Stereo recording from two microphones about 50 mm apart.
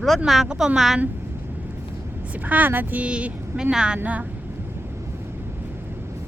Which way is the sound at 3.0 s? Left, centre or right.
Right.